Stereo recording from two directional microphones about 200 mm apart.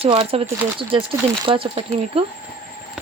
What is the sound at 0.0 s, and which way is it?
Speech, 30° right (ahead or behind).